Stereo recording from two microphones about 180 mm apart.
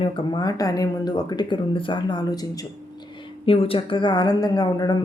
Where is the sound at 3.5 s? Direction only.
30° left (ahead or behind).